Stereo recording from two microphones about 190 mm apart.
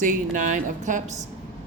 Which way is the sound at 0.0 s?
40° right (ahead or behind).